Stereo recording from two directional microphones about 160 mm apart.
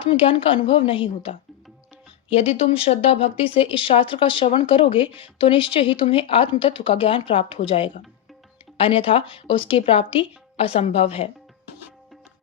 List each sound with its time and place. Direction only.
0.0 s speech: 35° left (ahead or behind)